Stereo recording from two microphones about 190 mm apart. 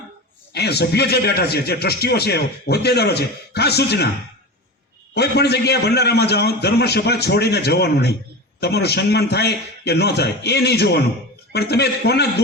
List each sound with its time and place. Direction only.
0.5 s a man's voice: 60° left (ahead or behind)
5.1 s a man's voice: 60° left (ahead or behind)